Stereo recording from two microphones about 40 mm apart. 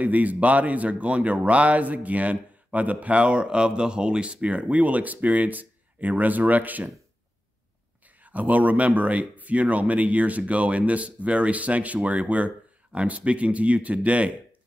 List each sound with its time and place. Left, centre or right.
0.0 s speech: right
8.2 s speech: right